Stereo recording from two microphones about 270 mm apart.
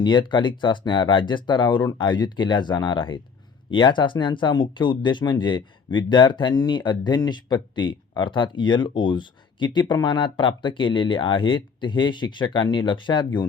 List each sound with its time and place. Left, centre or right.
0.0 s speech: centre